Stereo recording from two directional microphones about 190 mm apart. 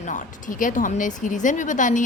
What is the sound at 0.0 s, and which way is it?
Speech, 40° left (ahead or behind).